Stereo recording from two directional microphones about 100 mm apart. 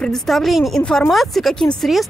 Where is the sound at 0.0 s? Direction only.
5° left (ahead or behind).